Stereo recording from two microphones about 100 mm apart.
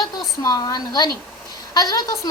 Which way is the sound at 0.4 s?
40° left (ahead or behind).